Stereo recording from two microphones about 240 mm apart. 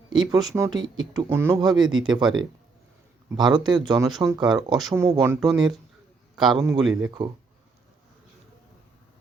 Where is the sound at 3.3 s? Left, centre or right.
Centre.